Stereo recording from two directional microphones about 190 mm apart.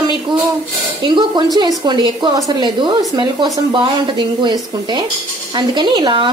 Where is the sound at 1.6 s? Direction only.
20° right (ahead or behind).